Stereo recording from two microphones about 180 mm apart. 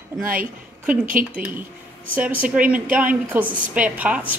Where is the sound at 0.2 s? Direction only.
50° right (ahead or behind).